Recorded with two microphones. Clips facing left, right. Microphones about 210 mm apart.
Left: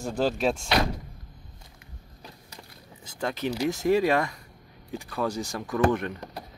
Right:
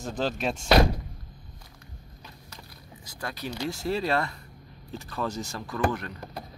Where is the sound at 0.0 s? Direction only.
10° left (ahead or behind).